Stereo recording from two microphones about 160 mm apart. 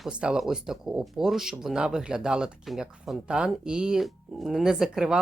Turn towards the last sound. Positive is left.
turn(degrees=-5)  # may be behind; listen again after turning